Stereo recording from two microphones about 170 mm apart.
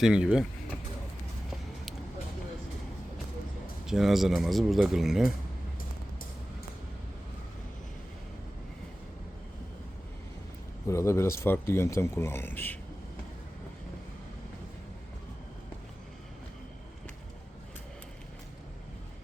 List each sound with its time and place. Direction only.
0.0 s speech: 5° right (ahead or behind)
3.8 s speech: centre (ahead or behind)
10.8 s speech: 15° left (ahead or behind)